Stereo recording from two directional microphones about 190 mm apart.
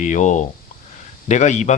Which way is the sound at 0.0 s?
40° left (ahead or behind).